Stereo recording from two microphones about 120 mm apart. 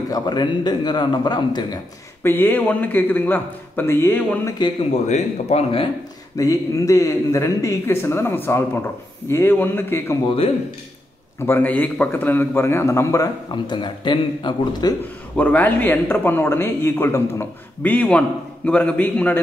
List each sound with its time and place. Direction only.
0.1 s a man's voice: 40° left (ahead or behind)
2.2 s speech: 15° left (ahead or behind)
4.6 s a man's voice: 40° left (ahead or behind)
5.0 s speech: 65° left (ahead or behind)
6.3 s a man's voice: 30° left (ahead or behind)
11.3 s a man's voice: 20° left (ahead or behind); by 15.0 s 40° left (ahead or behind)
15.3 s speech: 15° left (ahead or behind)